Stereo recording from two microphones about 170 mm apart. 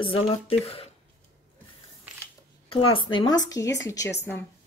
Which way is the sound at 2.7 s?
25° left (ahead or behind).